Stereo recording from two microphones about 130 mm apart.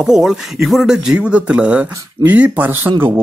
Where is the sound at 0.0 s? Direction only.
5° right (ahead or behind).